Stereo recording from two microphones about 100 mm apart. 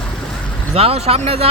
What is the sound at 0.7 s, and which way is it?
Speech, 85° right.